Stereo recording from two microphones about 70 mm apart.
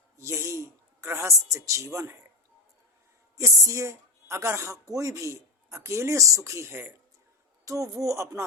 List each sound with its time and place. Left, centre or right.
0.2 s a man's voice: right
3.3 s speech: right
7.6 s speech: right